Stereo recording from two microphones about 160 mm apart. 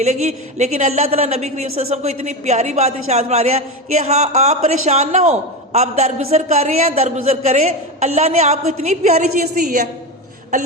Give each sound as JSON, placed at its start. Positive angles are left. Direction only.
{"t": 0.0, "sound": "a man's voice", "side_deg": -45}
{"t": 9.6, "sound": "a woman's voice", "side_deg": -55}